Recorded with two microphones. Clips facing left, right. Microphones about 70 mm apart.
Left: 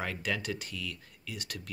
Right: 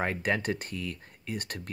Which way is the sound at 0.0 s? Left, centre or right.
Right.